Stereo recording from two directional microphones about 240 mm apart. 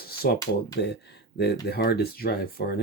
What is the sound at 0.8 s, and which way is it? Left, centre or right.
Speech, left.